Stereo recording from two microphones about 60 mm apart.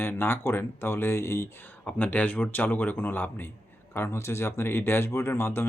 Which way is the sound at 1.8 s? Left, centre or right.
Left.